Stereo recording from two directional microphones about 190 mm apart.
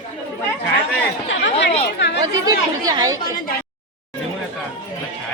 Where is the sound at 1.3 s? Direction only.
70° left (ahead or behind).